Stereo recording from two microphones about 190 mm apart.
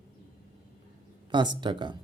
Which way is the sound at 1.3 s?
25° right (ahead or behind).